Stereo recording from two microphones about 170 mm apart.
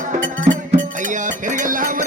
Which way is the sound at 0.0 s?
50° right (ahead or behind).